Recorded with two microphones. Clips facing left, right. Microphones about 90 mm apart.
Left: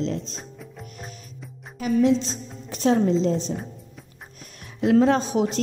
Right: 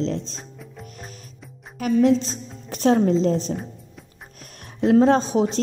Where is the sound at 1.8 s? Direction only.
50° right (ahead or behind).